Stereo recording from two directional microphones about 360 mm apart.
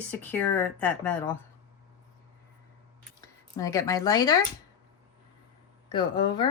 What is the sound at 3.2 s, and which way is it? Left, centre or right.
Speech, centre.